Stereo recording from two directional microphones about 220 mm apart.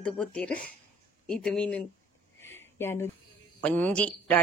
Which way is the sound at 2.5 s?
10° left (ahead or behind).